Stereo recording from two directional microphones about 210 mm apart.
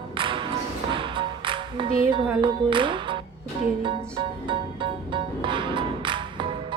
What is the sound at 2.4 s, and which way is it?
Speech, 25° right (ahead or behind).